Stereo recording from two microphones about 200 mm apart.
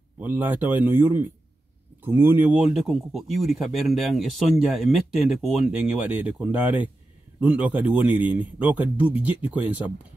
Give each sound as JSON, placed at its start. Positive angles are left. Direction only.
{"t": 0.2, "sound": "a man's voice", "side_deg": -10}